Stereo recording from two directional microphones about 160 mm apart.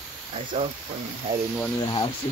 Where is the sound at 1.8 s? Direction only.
30° left (ahead or behind).